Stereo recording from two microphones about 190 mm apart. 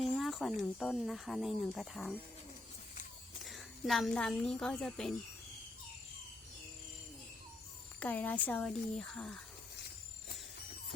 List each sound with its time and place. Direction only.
0.0 s speech: centre (ahead or behind)
3.4 s a woman's voice: centre (ahead or behind)
7.9 s speech: 10° left (ahead or behind)